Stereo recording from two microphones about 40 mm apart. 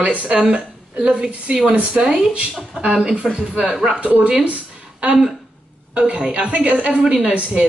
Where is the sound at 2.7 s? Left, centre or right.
Centre.